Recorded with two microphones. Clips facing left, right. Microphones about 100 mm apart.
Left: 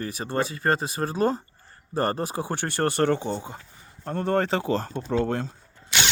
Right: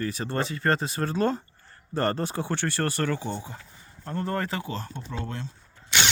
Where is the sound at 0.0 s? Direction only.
20° left (ahead or behind).